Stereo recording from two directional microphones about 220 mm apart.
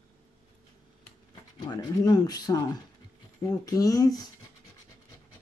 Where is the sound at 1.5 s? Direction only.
20° left (ahead or behind).